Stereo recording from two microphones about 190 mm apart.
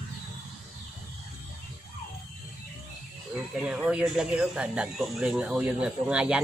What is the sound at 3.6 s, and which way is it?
Speech, 5° right (ahead or behind).